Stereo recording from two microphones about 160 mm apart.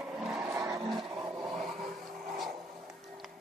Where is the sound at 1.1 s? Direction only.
25° right (ahead or behind).